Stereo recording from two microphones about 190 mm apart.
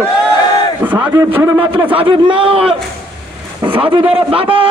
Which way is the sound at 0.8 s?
10° right (ahead or behind).